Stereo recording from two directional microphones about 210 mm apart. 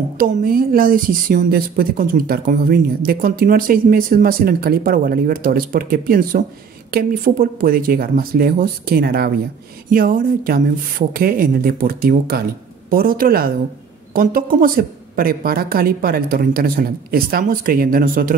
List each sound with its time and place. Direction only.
0.2 s a woman's voice: 45° right (ahead or behind)